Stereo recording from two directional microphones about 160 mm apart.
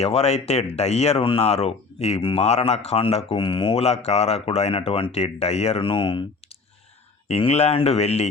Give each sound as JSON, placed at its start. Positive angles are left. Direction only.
{"t": 0.0, "sound": "speech", "side_deg": 40}